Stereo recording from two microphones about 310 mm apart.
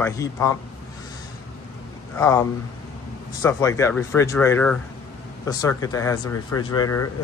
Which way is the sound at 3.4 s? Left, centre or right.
Centre.